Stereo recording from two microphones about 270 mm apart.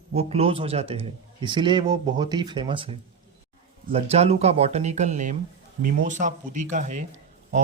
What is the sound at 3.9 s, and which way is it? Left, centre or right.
A man's voice, right.